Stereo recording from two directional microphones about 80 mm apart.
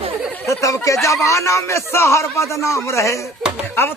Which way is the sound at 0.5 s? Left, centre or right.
Left.